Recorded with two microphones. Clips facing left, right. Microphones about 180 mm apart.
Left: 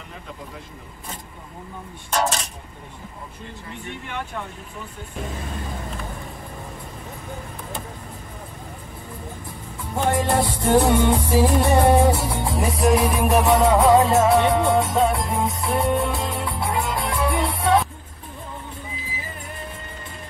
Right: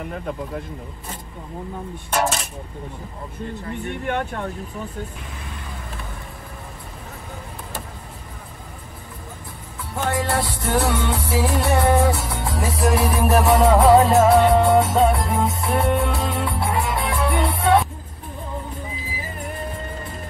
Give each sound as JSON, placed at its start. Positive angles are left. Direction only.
{"t": 3.8, "sound": "speech", "side_deg": -55}
{"t": 9.9, "sound": "music", "side_deg": 20}
{"t": 12.5, "sound": "music", "side_deg": 0}